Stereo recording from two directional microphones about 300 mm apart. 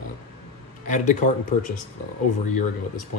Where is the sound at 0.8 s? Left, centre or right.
Left.